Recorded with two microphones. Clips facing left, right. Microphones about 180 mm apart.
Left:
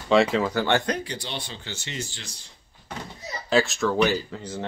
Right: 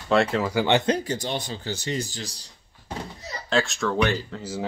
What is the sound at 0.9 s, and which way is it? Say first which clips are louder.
Speech: right 5 dB; 45° right (ahead or behind).